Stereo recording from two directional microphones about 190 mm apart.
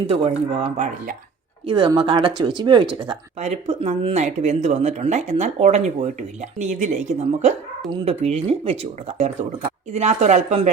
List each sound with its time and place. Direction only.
0.1 s speech: 30° right (ahead or behind)
3.3 s speech: 35° right (ahead or behind)